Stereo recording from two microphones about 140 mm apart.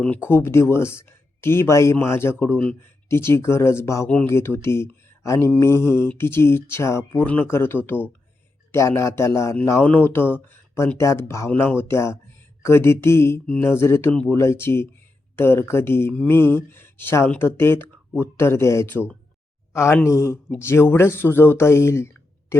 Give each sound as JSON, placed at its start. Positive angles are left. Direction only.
{"t": 0.0, "sound": "a man's voice", "side_deg": 15}